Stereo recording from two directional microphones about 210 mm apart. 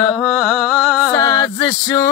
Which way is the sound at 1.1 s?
15° left (ahead or behind).